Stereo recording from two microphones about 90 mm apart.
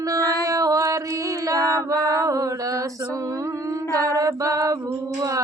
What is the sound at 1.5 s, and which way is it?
Female singing, 40° right (ahead or behind).